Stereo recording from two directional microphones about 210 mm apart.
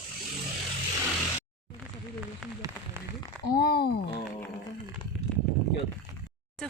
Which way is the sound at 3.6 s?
50° left (ahead or behind).